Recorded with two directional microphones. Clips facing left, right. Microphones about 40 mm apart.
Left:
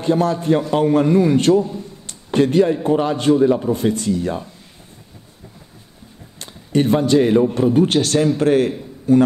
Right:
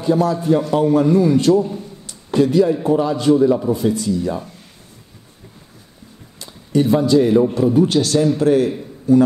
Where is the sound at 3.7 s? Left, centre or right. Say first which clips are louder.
Even; left.